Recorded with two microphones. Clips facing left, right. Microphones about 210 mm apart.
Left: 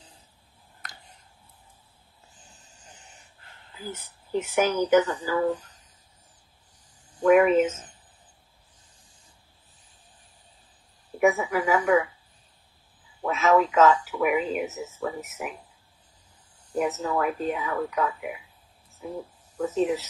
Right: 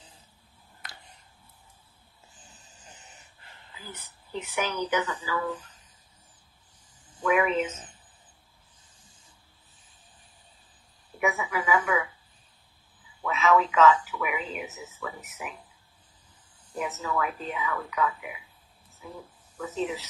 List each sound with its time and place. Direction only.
3.7 s speech: 45° left (ahead or behind)
7.2 s speech: 45° left (ahead or behind)
11.1 s speech: 45° left (ahead or behind)
13.2 s speech: 45° left (ahead or behind)
16.7 s speech: 45° left (ahead or behind)
19.6 s speech: 45° left (ahead or behind)